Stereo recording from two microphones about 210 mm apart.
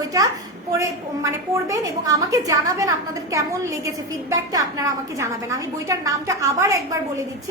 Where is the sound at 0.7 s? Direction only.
15° right (ahead or behind).